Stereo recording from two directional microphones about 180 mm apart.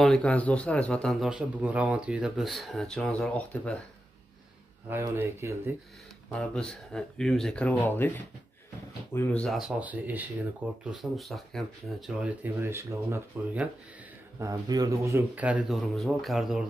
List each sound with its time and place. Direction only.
0.0 s a man's voice: 5° left (ahead or behind)
4.8 s speech: 15° right (ahead or behind)
6.3 s a man's voice: 5° left (ahead or behind)
9.1 s a man's voice: 10° left (ahead or behind)